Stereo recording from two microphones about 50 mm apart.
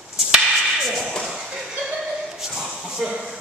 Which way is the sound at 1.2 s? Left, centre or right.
Centre.